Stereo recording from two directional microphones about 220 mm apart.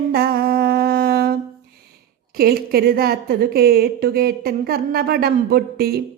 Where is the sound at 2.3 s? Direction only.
45° right (ahead or behind).